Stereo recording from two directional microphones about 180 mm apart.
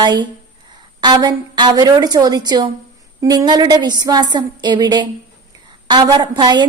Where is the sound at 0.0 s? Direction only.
25° right (ahead or behind).